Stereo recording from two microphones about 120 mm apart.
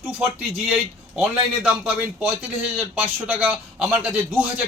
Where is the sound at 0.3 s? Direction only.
10° right (ahead or behind).